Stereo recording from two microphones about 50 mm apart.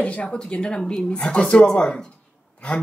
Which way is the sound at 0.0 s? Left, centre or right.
Left.